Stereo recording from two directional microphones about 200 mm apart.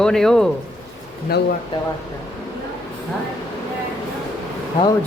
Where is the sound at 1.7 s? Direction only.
25° left (ahead or behind).